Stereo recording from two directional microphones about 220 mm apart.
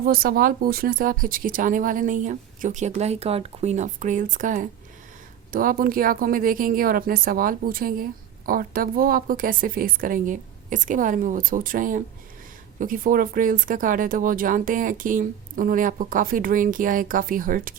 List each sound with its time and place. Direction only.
0.0 s speech: 40° right (ahead or behind)